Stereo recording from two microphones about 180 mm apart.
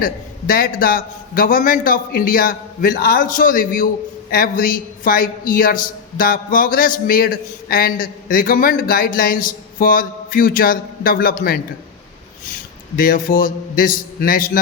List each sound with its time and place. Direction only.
0.0 s a man's voice: 55° left (ahead or behind)
13.0 s a man's voice: 55° left (ahead or behind)